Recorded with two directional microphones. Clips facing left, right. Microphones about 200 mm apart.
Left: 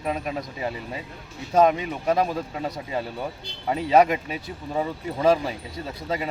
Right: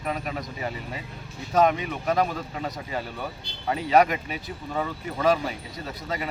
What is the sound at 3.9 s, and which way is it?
Speech, 25° left (ahead or behind).